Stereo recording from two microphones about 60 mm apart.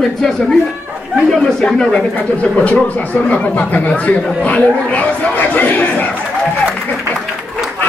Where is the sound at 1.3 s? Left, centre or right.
Centre.